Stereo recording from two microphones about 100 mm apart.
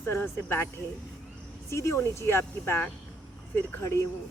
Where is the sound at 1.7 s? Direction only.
30° left (ahead or behind).